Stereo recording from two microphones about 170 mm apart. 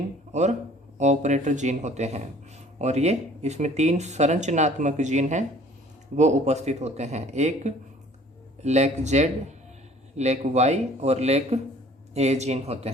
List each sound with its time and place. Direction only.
0.3 s speech: 45° right (ahead or behind)